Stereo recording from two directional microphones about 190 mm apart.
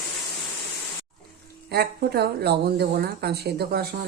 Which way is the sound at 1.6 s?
55° right (ahead or behind).